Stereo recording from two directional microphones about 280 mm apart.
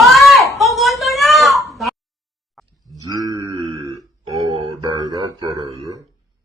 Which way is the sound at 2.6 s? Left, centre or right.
Centre.